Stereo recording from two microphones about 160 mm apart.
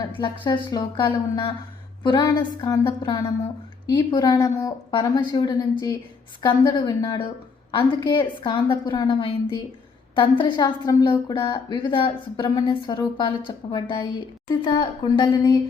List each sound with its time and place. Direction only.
0.2 s a woman's voice: 30° left (ahead or behind)